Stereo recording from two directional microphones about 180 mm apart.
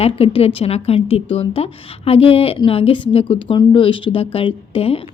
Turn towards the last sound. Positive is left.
turn(degrees=30)  # may be behind; listen again after turning